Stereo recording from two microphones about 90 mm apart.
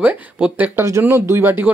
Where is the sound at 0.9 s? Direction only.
30° right (ahead or behind).